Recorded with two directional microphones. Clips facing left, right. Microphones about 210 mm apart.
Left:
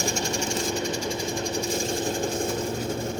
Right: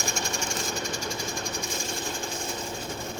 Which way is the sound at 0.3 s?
30° left (ahead or behind).